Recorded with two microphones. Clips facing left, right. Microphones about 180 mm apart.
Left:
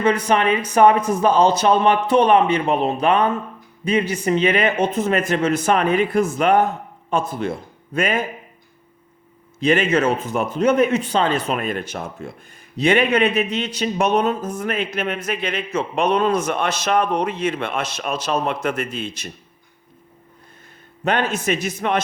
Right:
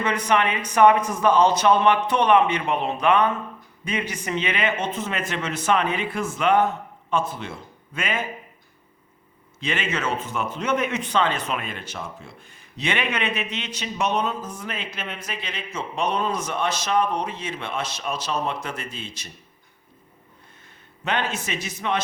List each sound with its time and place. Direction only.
0.0 s a man's voice: 30° left (ahead or behind)
9.6 s a man's voice: 40° left (ahead or behind); by 18.1 s 70° left (ahead or behind)
18.1 s speech: 60° left (ahead or behind)
21.0 s speech: 40° left (ahead or behind)